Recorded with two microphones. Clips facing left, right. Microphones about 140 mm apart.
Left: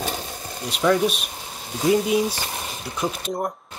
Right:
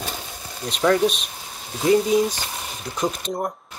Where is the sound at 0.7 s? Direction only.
5° left (ahead or behind).